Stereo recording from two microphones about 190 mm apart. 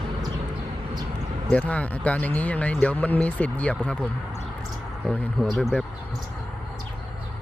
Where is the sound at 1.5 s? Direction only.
5° left (ahead or behind).